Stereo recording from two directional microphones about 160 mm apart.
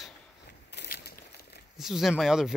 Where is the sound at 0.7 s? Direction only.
85° left.